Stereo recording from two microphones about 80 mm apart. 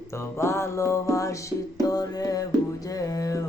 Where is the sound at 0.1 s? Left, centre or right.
Left.